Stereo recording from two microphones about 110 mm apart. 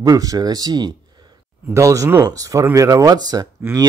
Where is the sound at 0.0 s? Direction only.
35° right (ahead or behind).